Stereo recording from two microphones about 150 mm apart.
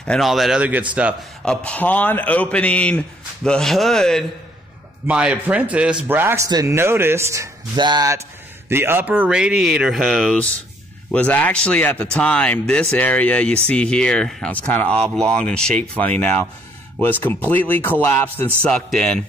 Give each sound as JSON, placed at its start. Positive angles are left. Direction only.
{"t": 0.0, "sound": "speech", "side_deg": 0}
{"t": 1.4, "sound": "a man's voice", "side_deg": 5}
{"t": 5.0, "sound": "a man's voice", "side_deg": -5}
{"t": 7.7, "sound": "speech", "side_deg": -30}
{"t": 8.6, "sound": "a man's voice", "side_deg": -15}